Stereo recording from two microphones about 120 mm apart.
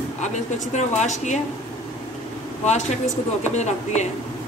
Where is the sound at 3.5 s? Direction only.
75° left (ahead or behind).